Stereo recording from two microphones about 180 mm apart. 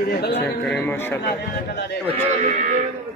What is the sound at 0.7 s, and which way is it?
Speech, 10° left (ahead or behind).